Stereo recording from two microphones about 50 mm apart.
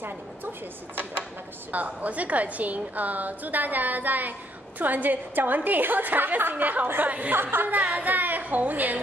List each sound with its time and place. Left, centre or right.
0.0 s speech: right
1.7 s a woman's voice: right